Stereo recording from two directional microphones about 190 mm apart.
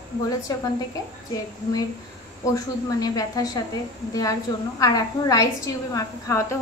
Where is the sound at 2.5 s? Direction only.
20° left (ahead or behind).